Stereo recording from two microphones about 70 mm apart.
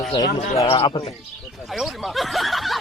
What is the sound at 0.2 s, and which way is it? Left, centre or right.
Speech, left.